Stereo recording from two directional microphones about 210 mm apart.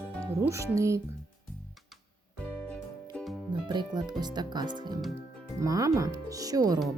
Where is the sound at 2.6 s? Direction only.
5° left (ahead or behind).